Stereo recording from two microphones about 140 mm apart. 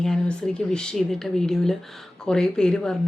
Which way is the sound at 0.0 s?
5° left (ahead or behind).